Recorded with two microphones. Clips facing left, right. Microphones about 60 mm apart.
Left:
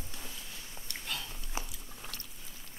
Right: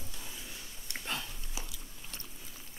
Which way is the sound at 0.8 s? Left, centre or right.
Right.